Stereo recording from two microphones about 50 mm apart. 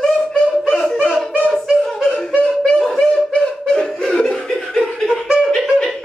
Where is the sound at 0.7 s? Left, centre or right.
Centre.